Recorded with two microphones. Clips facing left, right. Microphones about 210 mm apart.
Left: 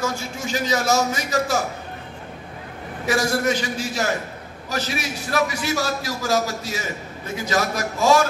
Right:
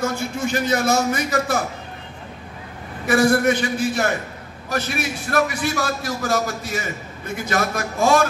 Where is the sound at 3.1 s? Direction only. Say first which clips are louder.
Right 5 dB; 55° right (ahead or behind).